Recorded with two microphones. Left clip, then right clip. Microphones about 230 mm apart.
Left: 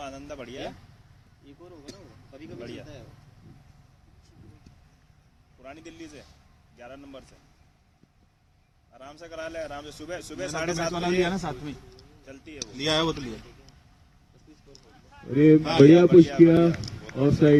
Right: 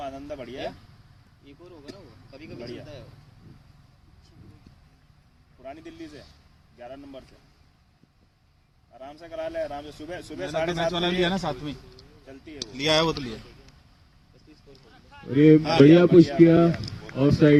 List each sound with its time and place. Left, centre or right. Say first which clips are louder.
0.0 s a sound: right 3 dB; left
2.3 s speech: right 1 dB; right
5.6 s a man's voice: right 3 dB; left
9.0 s a man's voice: right 3 dB; left
10.9 s a man's voice: right 1 dB; centre
12.2 s speech: even; left
12.7 s speech: right 3 dB; right
15.1 s a man's voice: right 1 dB; right